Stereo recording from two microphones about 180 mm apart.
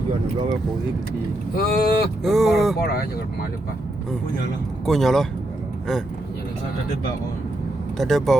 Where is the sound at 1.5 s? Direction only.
60° left (ahead or behind).